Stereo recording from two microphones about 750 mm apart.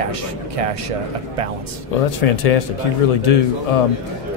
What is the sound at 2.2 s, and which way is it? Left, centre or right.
Speech, left.